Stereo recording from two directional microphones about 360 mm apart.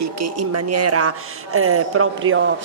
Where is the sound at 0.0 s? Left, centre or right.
Right.